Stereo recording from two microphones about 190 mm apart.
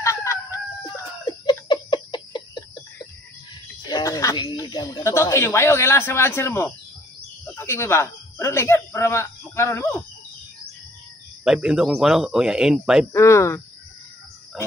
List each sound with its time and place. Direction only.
0.0 s chicken: 15° left (ahead or behind)
1.4 s a sound: 25° left (ahead or behind)
3.8 s speech: 20° left (ahead or behind)
11.4 s speech: 5° right (ahead or behind)
13.1 s speech: 15° left (ahead or behind)